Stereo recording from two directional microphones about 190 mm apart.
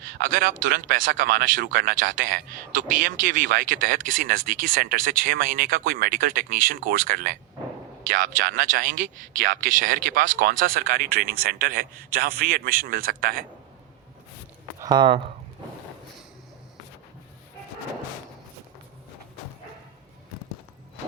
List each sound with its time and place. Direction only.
0.1 s speech: 45° right (ahead or behind)
14.8 s speech: 20° right (ahead or behind)